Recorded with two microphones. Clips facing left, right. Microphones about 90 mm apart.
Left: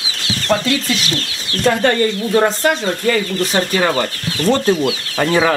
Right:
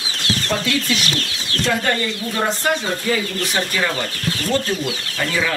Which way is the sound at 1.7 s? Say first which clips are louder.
Left 7 dB; 45° left (ahead or behind).